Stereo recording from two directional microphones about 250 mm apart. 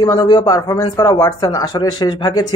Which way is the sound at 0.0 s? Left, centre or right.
Centre.